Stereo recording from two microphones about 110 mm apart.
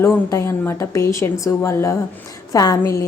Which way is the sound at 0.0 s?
25° left (ahead or behind).